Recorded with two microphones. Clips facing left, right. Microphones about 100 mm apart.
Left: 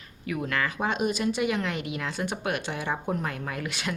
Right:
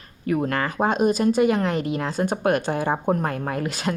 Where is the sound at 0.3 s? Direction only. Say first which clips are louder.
Right 6 dB; 40° right (ahead or behind).